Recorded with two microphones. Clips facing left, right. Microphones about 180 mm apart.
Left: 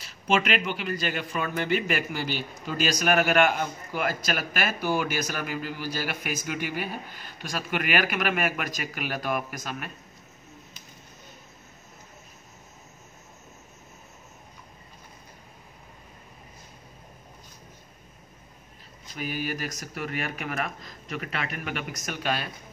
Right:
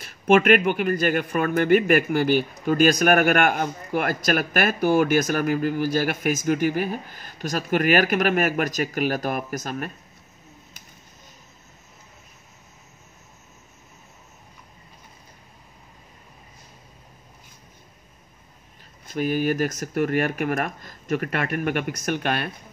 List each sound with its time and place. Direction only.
0.0 s a man's voice: 55° right (ahead or behind)
19.1 s a man's voice: 45° right (ahead or behind)